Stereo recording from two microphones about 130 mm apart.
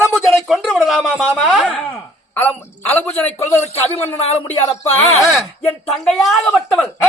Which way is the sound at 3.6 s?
55° left (ahead or behind).